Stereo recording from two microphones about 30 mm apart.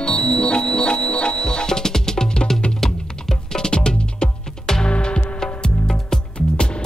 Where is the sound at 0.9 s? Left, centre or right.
Left.